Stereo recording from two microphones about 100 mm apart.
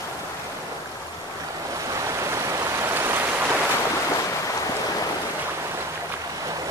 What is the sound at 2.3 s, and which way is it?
Waves, 30° right (ahead or behind).